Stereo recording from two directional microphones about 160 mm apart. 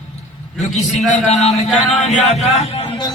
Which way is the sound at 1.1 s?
45° left (ahead or behind).